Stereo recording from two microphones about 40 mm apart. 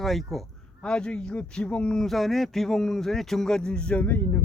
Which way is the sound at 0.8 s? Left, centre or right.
Left.